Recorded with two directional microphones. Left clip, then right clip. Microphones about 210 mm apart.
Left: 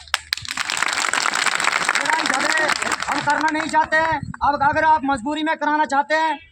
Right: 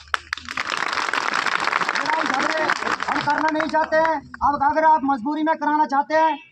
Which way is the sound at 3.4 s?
55° left (ahead or behind).